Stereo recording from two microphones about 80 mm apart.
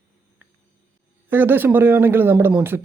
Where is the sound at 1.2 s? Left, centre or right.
Right.